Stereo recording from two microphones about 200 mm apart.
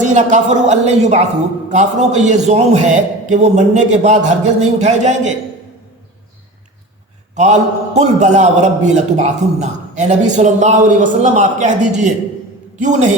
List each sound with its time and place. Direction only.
0.0 s a man's voice: 35° right (ahead or behind)
7.3 s a man's voice: 35° right (ahead or behind)